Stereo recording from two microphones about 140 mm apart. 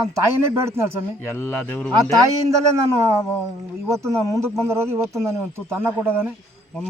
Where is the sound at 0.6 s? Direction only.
20° right (ahead or behind).